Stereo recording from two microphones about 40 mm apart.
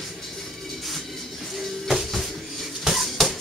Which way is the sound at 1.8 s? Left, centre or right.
Centre.